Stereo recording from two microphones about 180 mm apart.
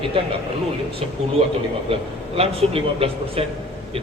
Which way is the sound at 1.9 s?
35° right (ahead or behind).